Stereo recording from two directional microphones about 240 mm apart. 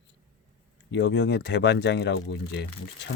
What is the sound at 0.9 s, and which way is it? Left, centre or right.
Speech, left.